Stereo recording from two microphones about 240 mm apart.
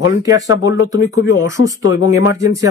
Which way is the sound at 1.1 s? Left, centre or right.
Left.